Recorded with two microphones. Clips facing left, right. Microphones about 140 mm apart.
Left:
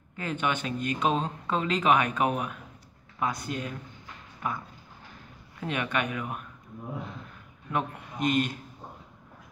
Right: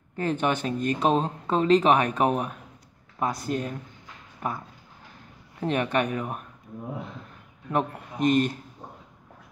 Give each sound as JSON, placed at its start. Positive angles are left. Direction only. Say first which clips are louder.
{"t": 0.1, "sound": "speech", "louder": "right 5 dB", "side_deg": -40}
{"t": 5.6, "sound": "speech", "louder": "right 5 dB", "side_deg": -40}
{"t": 7.7, "sound": "speech", "louder": "right 4 dB", "side_deg": -40}